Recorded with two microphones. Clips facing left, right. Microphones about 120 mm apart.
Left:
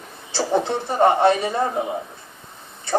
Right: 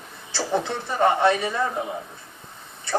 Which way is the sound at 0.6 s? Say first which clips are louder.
Left 3 dB; 30° left (ahead or behind).